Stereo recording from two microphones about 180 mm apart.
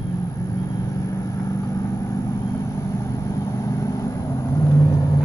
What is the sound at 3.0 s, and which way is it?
Vehicle, 15° left (ahead or behind).